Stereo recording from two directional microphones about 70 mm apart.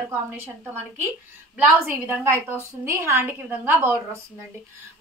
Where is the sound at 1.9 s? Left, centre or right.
Right.